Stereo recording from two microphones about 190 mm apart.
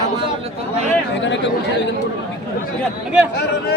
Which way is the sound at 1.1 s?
70° left (ahead or behind).